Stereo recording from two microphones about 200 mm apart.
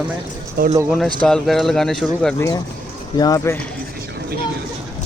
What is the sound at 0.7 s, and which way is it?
Speech, 15° right (ahead or behind).